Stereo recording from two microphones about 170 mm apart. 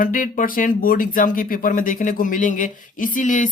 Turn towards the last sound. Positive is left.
turn(degrees=50)  # may be behind; listen again after turning